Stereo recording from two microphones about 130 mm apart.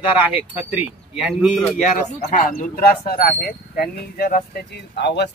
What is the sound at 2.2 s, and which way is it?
Speech, 90° left.